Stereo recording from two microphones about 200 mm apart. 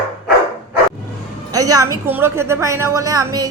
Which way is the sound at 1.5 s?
15° right (ahead or behind).